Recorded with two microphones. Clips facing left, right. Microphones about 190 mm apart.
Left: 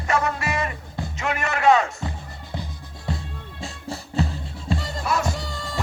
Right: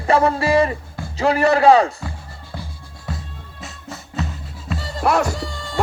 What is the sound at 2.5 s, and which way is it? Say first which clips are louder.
Music: left 1 dB; 20° left (ahead or behind).